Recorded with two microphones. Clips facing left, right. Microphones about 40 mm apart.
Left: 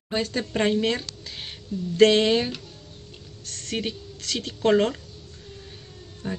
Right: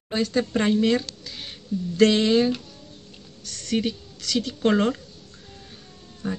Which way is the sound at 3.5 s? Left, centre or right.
Left.